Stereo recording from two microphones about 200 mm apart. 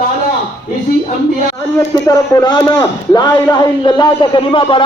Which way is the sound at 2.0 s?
20° left (ahead or behind).